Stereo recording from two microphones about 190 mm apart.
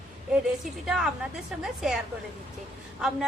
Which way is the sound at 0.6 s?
Centre (ahead or behind).